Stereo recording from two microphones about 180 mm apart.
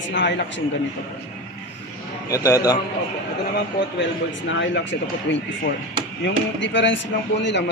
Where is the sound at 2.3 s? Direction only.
20° left (ahead or behind).